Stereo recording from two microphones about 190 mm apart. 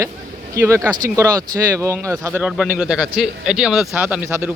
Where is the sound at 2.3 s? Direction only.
5° right (ahead or behind).